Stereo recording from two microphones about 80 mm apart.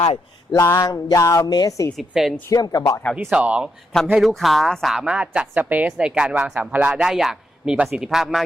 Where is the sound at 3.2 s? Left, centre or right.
Centre.